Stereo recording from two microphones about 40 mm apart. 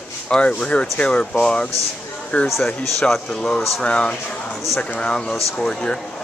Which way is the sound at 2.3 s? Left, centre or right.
Left.